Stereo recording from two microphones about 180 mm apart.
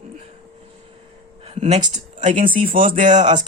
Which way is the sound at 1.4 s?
35° right (ahead or behind).